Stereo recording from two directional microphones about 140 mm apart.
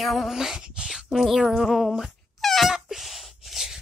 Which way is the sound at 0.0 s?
Centre (ahead or behind).